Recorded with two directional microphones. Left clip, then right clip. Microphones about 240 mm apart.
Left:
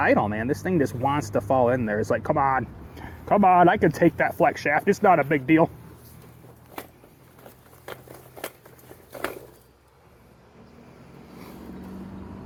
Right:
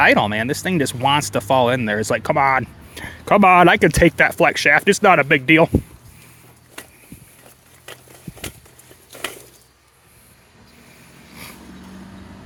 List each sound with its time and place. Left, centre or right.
0.0 s speech: right
2.9 s speech: right